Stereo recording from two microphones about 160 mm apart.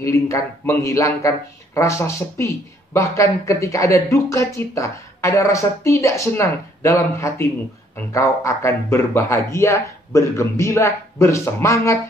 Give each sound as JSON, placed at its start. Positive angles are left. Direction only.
{"t": 0.0, "sound": "a man's voice", "side_deg": 20}